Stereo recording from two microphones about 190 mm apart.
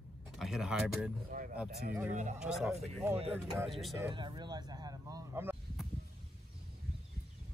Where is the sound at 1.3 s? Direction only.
45° right (ahead or behind).